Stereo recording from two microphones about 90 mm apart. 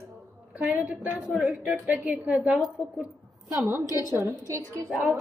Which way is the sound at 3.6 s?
30° right (ahead or behind).